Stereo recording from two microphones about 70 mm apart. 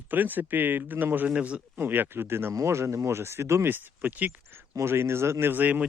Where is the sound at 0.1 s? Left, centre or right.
Right.